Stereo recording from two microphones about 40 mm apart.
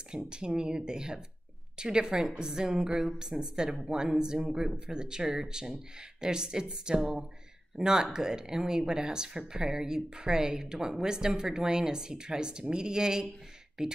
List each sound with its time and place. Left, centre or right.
0.1 s speech: right